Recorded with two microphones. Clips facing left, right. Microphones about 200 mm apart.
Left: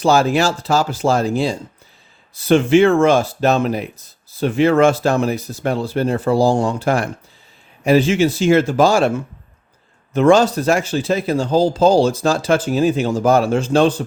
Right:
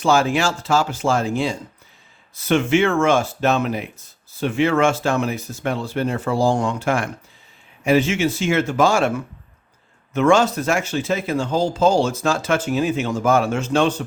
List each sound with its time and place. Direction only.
0.0 s speech: 40° left (ahead or behind)